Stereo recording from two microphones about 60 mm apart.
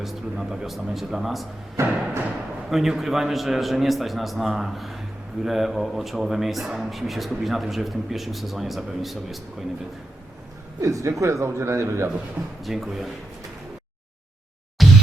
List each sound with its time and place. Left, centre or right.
0.0 s speech: centre
1.8 s a man's voice: right
2.6 s speech: centre
10.8 s a man's voice: right
12.6 s speech: centre
14.8 s music: centre